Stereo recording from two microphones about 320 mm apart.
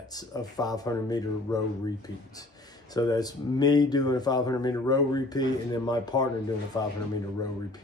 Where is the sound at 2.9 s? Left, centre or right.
Centre.